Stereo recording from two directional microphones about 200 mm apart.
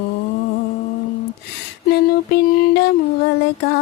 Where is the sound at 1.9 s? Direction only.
55° left (ahead or behind).